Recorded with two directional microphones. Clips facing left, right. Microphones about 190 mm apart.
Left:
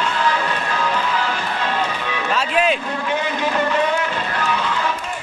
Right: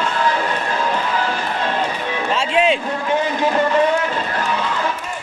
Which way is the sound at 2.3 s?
25° right (ahead or behind).